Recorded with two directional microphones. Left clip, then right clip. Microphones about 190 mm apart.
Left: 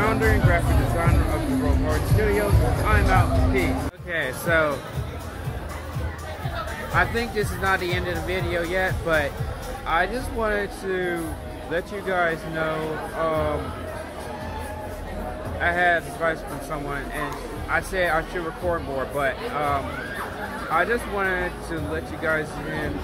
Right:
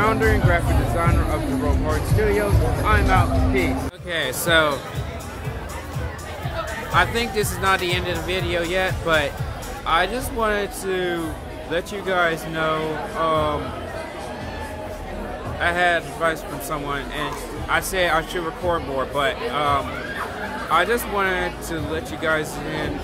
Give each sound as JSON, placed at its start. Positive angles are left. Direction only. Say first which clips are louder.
{"t": 0.0, "sound": "a man's voice", "louder": "right 3 dB", "side_deg": -10}
{"t": 4.1, "sound": "speech", "louder": "right 3 dB", "side_deg": -20}
{"t": 6.9, "sound": "a man's voice", "louder": "right 3 dB", "side_deg": -10}
{"t": 15.6, "sound": "a man's voice", "louder": "right 1 dB", "side_deg": -10}